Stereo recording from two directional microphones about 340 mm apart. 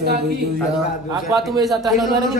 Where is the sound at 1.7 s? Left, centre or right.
Centre.